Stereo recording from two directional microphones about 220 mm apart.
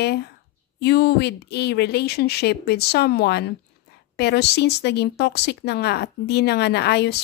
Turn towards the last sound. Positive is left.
turn(degrees=50)  # may be behind; listen again after turning